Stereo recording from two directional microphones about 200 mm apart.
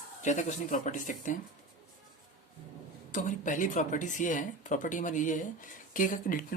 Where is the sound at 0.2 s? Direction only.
35° left (ahead or behind).